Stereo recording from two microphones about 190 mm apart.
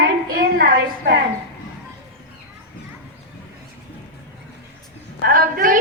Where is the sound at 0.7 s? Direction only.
70° right (ahead or behind).